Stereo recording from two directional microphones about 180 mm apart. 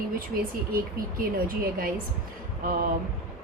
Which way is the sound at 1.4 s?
55° right (ahead or behind).